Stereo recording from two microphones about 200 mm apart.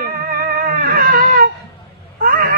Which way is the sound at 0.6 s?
45° right (ahead or behind).